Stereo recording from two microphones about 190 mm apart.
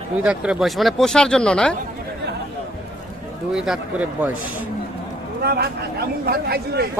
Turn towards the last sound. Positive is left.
turn(degrees=-55)  # may be behind; listen again after turning